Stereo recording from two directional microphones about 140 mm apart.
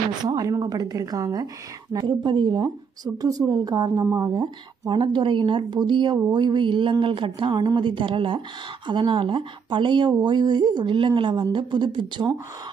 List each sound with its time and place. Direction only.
0.2 s a woman's voice: 25° right (ahead or behind)